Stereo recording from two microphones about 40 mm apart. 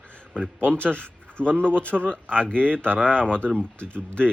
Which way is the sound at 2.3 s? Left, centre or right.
Left.